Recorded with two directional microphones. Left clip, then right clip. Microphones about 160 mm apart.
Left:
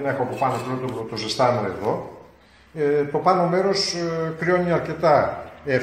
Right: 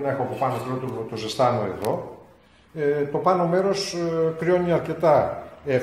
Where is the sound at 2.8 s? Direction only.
30° right (ahead or behind).